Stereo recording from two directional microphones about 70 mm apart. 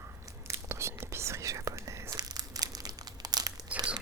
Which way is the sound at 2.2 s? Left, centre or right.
Right.